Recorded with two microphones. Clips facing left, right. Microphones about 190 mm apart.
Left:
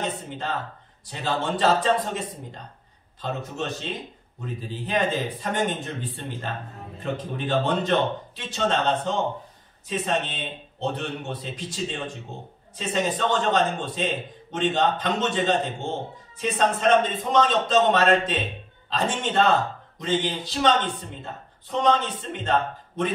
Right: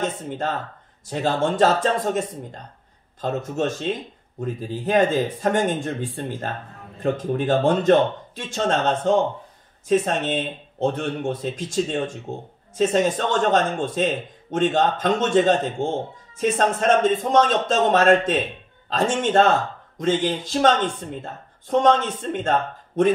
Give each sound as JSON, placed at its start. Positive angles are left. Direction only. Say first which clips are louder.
{"t": 1.0, "sound": "a man's voice", "louder": "right 5 dB", "side_deg": -45}
{"t": 4.8, "sound": "a man's voice", "louder": "right 6 dB", "side_deg": -45}